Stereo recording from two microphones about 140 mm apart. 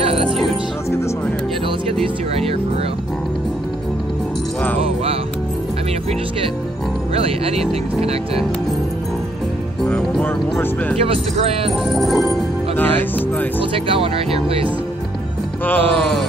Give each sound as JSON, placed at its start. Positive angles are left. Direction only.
{"t": 0.0, "sound": "music", "side_deg": -45}
{"t": 7.2, "sound": "speech", "side_deg": -45}
{"t": 9.8, "sound": "music", "side_deg": 5}
{"t": 11.0, "sound": "speech", "side_deg": -45}
{"t": 11.9, "sound": "speech", "side_deg": 0}
{"t": 12.7, "sound": "speech", "side_deg": 10}
{"t": 13.8, "sound": "speech", "side_deg": -40}
{"t": 15.6, "sound": "music", "side_deg": 15}